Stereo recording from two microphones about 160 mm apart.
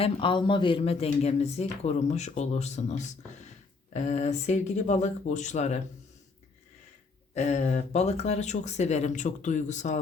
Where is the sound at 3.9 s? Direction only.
45° left (ahead or behind).